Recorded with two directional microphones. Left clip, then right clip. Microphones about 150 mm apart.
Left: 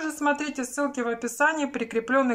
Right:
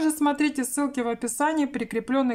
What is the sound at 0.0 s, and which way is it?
A woman's voice, 45° right (ahead or behind).